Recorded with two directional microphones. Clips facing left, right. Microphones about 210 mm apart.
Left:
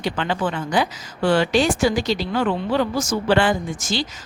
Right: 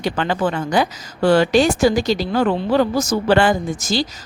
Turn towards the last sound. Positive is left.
turn(degrees=-40)  # may be behind; listen again after turning